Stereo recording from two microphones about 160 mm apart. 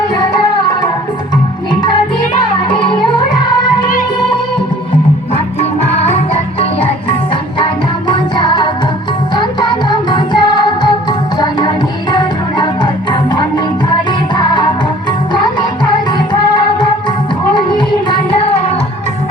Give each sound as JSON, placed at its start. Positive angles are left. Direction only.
{"t": 2.6, "sound": "music", "side_deg": 30}
{"t": 6.1, "sound": "music", "side_deg": 35}
{"t": 12.1, "sound": "music", "side_deg": 30}
{"t": 15.3, "sound": "music", "side_deg": 30}
{"t": 17.5, "sound": "music", "side_deg": 30}